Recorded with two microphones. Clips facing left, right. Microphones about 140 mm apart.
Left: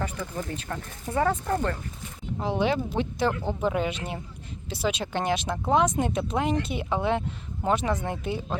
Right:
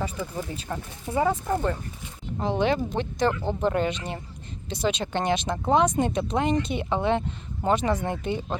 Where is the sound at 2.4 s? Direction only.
5° left (ahead or behind).